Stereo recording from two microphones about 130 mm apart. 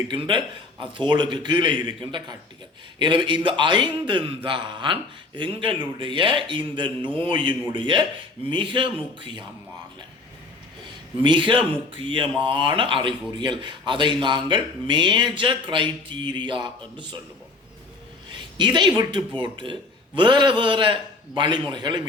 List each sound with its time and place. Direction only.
0.1 s speech: 40° right (ahead or behind)
11.2 s speech: 40° right (ahead or behind)
18.5 s speech: 35° right (ahead or behind)